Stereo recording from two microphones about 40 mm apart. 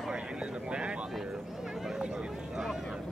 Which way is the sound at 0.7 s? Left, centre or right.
Right.